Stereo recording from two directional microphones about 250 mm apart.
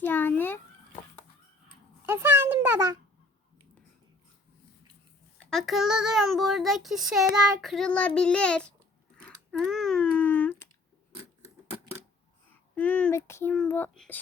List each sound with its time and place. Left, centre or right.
0.0 s speech: centre
2.0 s a sound: centre
5.4 s a child's voice: centre
9.2 s a sound: centre
11.1 s scissors: centre
12.7 s speech: centre